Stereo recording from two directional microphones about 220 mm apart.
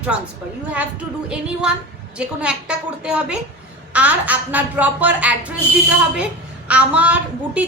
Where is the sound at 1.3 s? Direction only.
5° right (ahead or behind).